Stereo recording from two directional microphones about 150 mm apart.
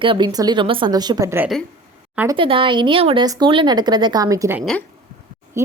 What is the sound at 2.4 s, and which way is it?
Speech, 35° right (ahead or behind).